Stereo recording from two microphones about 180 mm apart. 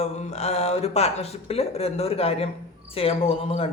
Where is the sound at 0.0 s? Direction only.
40° left (ahead or behind).